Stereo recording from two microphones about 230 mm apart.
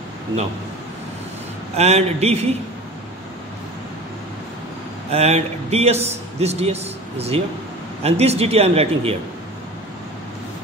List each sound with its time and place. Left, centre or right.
1.8 s a man's voice: right
5.1 s a man's voice: right